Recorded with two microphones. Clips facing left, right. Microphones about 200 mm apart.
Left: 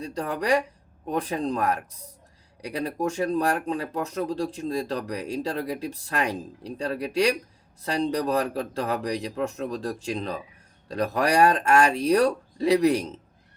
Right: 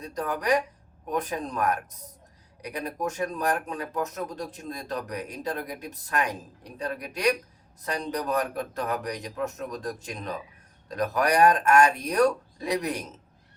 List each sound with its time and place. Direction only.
0.0 s a man's voice: 30° left (ahead or behind)